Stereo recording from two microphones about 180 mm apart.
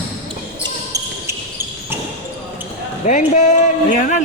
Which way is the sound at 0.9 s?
15° right (ahead or behind).